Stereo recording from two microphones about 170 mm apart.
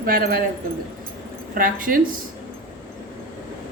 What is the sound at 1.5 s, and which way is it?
Speech, 55° right (ahead or behind).